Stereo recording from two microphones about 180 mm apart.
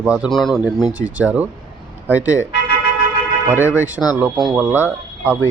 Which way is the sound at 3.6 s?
15° left (ahead or behind).